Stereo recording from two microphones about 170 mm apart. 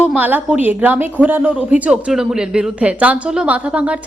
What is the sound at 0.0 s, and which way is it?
A woman's voice, 10° right (ahead or behind).